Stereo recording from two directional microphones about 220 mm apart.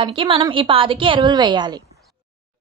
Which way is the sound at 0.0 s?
20° right (ahead or behind).